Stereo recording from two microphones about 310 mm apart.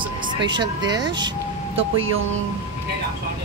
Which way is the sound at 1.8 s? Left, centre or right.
Right.